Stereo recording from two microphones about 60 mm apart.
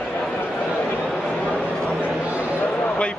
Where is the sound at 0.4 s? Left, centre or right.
Left.